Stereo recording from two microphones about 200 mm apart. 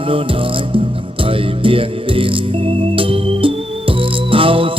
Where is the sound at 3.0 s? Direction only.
25° right (ahead or behind).